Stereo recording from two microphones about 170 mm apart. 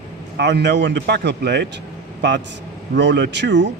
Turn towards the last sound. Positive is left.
turn(degrees=-90)